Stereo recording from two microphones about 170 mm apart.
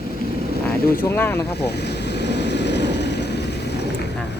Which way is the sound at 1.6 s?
75° left (ahead or behind).